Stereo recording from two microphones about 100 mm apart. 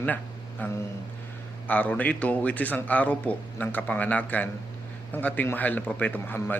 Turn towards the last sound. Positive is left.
turn(degrees=20)  # may be behind; listen again after turning